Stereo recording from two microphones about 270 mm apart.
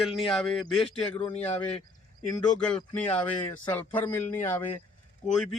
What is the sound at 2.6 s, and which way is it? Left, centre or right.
Speech, centre.